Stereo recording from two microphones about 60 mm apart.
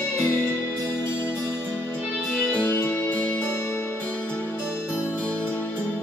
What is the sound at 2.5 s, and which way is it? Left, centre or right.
Music, left.